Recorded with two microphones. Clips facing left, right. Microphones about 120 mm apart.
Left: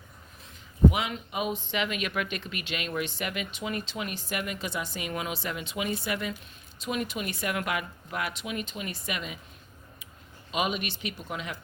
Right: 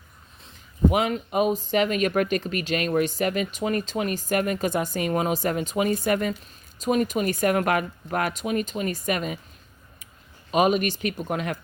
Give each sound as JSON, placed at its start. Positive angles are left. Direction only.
{"t": 0.9, "sound": "speech", "side_deg": -50}
{"t": 10.5, "sound": "speech", "side_deg": -45}